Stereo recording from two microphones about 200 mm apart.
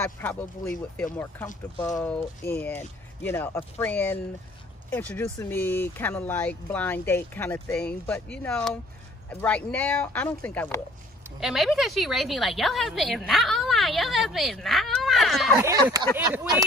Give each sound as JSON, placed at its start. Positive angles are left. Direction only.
{"t": 0.0, "sound": "a woman's voice", "side_deg": 10}
{"t": 15.6, "sound": "speech", "side_deg": -20}